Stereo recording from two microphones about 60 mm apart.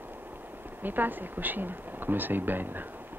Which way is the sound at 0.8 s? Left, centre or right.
Right.